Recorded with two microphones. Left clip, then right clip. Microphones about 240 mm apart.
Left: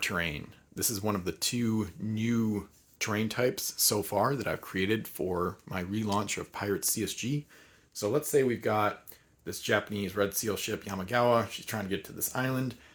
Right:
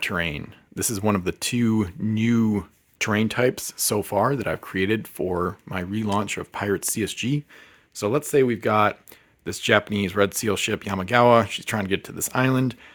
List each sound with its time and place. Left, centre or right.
0.0 s speech: right